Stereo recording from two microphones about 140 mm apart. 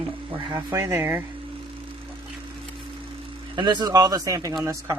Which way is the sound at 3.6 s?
30° right (ahead or behind).